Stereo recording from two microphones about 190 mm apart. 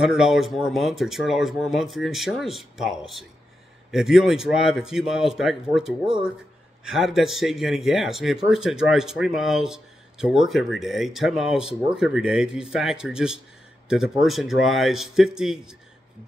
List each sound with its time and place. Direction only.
0.0 s speech: 5° right (ahead or behind)